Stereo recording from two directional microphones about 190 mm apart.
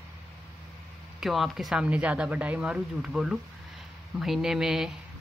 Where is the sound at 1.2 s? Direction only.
Centre (ahead or behind).